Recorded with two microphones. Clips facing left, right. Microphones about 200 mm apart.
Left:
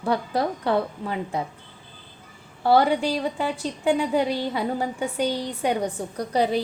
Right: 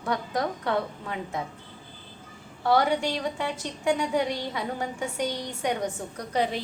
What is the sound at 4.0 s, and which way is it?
A woman's voice, 30° left (ahead or behind).